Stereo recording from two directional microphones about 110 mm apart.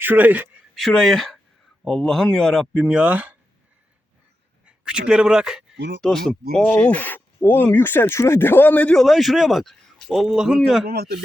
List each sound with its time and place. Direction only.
0.0 s speech: 15° right (ahead or behind)
0.8 s speech: 5° left (ahead or behind)
2.8 s speech: 10° right (ahead or behind)
4.6 s speech: 10° right (ahead or behind)
6.0 s speech: 5° left (ahead or behind)